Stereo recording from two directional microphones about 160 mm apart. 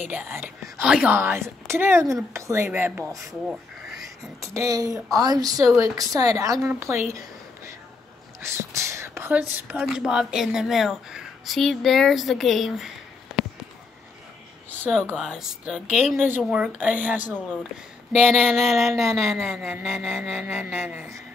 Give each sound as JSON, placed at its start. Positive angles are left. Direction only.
{"t": 0.1, "sound": "speech", "side_deg": -10}
{"t": 3.4, "sound": "a sound", "side_deg": 0}
{"t": 4.4, "sound": "speech", "side_deg": -20}
{"t": 8.4, "sound": "speech", "side_deg": -15}
{"t": 13.4, "sound": "a sound", "side_deg": 0}
{"t": 14.8, "sound": "speech", "side_deg": 5}
{"t": 18.1, "sound": "speech", "side_deg": 5}
{"t": 20.3, "sound": "speech", "side_deg": -10}